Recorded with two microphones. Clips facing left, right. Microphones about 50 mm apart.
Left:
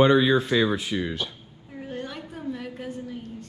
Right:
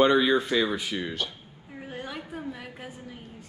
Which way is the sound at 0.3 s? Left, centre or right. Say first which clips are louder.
Left 2 dB; left.